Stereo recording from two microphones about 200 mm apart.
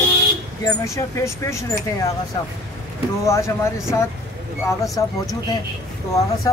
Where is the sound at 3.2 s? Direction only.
15° left (ahead or behind).